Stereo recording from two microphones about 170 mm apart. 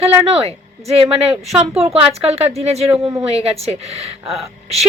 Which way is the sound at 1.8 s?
35° right (ahead or behind).